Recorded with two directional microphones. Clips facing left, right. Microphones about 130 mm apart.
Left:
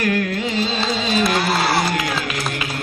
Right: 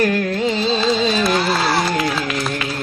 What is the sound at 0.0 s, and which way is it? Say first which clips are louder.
Carnatic music: right 3 dB; 30° right (ahead or behind).